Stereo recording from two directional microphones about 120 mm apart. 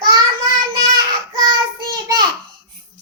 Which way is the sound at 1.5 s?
35° right (ahead or behind).